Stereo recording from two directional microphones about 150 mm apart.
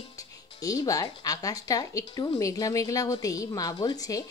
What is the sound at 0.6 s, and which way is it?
Speech, 25° left (ahead or behind).